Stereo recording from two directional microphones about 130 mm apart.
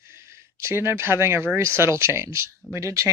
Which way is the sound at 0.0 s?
20° right (ahead or behind).